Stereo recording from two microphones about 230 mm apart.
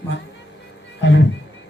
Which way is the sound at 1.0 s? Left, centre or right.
Left.